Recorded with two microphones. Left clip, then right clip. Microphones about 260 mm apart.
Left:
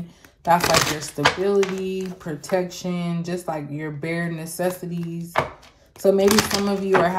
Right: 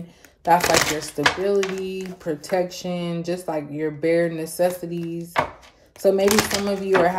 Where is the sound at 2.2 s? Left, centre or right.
Centre.